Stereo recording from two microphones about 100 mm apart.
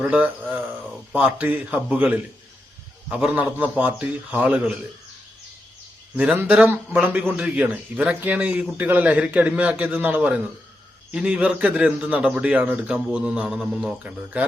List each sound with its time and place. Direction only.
0.0 s a man's voice: 15° right (ahead or behind)
3.3 s a man's voice: 15° right (ahead or behind)
6.1 s a man's voice: 15° right (ahead or behind)